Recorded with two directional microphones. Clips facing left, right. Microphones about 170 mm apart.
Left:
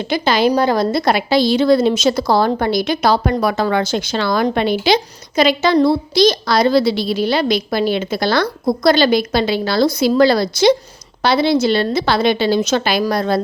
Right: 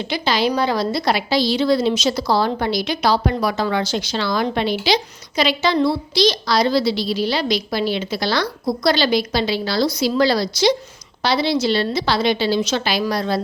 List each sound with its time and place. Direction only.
0.0 s a woman's voice: 50° left (ahead or behind)